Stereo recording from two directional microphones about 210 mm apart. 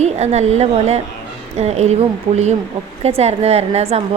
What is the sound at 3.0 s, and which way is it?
Speech, 30° right (ahead or behind).